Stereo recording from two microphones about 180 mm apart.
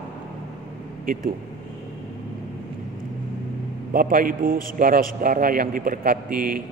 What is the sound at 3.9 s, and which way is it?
A man's voice, 50° right (ahead or behind).